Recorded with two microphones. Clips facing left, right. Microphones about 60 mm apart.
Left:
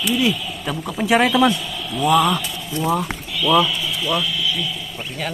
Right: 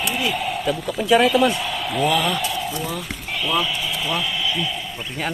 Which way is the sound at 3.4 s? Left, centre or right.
Right.